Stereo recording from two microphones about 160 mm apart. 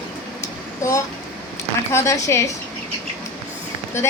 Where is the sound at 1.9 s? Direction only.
20° left (ahead or behind).